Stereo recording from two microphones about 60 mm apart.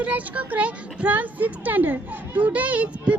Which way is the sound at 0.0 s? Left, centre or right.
Right.